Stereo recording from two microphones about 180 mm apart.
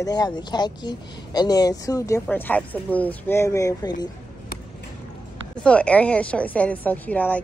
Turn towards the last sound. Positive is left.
turn(degrees=10)  # may be behind; listen again after turning